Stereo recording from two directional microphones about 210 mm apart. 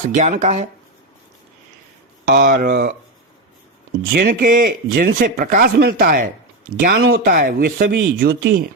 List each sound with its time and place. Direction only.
0.1 s speech: 35° right (ahead or behind)
2.2 s speech: 45° right (ahead or behind)
4.1 s speech: 45° right (ahead or behind)